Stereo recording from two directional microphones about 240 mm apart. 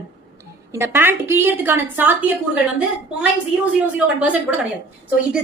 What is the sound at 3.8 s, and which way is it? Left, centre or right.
Speech, centre.